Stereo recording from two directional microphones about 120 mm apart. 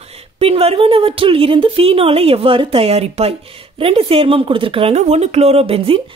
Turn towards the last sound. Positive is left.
turn(degrees=-50)  # may be behind; listen again after turning